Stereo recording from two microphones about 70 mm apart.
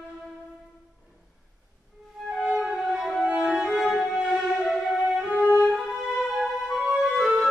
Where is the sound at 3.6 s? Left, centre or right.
Centre.